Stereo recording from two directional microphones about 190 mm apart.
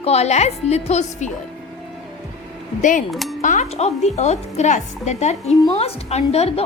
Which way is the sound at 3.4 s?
40° left (ahead or behind).